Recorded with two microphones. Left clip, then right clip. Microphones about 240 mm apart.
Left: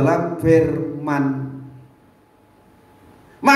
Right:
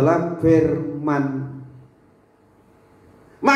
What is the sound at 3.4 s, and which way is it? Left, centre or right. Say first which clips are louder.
Quack: left 3 dB; left.